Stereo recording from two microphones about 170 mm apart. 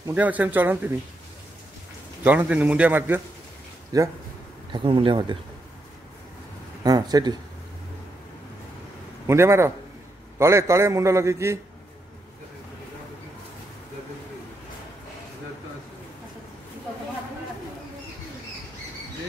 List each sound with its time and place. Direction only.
0.0 s a man's voice: 10° right (ahead or behind)
2.2 s a man's voice: 10° right (ahead or behind)
4.7 s speech: 30° right (ahead or behind)
6.8 s speech: 25° right (ahead or behind)
9.3 s a man's voice: 15° right (ahead or behind)